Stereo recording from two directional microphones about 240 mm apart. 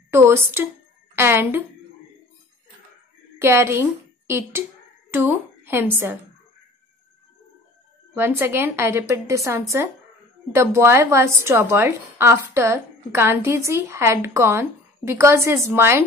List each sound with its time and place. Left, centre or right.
0.1 s a woman's voice: centre
3.3 s a woman's voice: centre
8.1 s a woman's voice: centre